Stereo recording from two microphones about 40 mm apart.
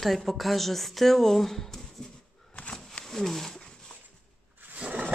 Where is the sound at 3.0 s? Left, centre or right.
Centre.